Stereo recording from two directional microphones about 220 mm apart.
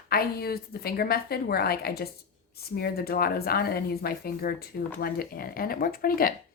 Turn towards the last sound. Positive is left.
turn(degrees=40)  # may be behind; listen again after turning